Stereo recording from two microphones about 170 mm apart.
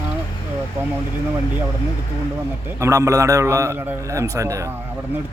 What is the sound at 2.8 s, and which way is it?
A man's voice, 20° right (ahead or behind).